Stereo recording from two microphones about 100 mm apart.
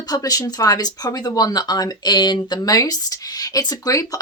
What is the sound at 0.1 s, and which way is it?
Speech, 35° left (ahead or behind).